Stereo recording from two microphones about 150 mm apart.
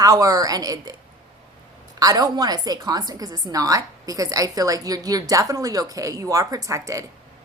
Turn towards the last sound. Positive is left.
turn(degrees=-20)  # may be behind; listen again after turning